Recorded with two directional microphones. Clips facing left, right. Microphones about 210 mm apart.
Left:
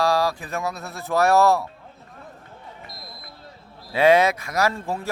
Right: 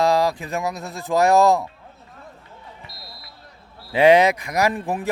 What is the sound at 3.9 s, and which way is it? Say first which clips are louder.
Speech: right 3 dB; 15° right (ahead or behind).